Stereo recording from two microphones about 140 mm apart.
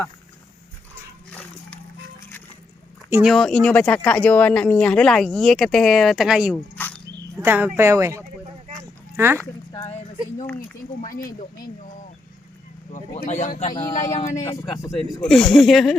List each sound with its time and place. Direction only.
1.3 s a sound: 10° left (ahead or behind)
3.2 s speech: 5° left (ahead or behind)
6.7 s dog: 10° left (ahead or behind)
7.3 s speech: 15° right (ahead or behind)
8.8 s a sound: 15° right (ahead or behind)
11.3 s speech: 90° left
13.2 s speech: 60° left (ahead or behind)
13.7 s speech: 25° left (ahead or behind)
14.0 s speech: 60° left (ahead or behind)
14.7 s speech: 25° left (ahead or behind)
15.2 s speech: 5° left (ahead or behind)